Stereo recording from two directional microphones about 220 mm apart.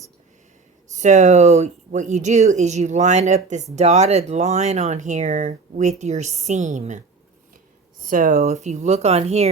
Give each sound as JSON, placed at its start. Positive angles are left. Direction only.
{"t": 0.9, "sound": "speech", "side_deg": -35}
{"t": 8.0, "sound": "speech", "side_deg": -40}